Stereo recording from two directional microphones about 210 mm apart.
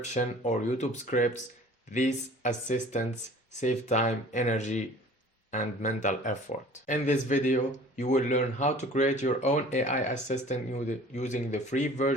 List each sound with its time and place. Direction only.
0.0 s speech: 35° left (ahead or behind)